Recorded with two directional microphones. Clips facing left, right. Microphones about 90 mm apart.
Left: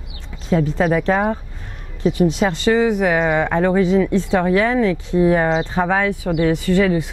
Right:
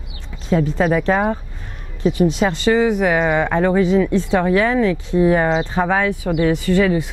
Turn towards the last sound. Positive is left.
turn(degrees=-15)  # may be behind; listen again after turning